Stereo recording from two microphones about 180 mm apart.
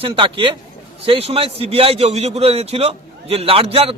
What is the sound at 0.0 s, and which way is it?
A man's voice, 30° right (ahead or behind).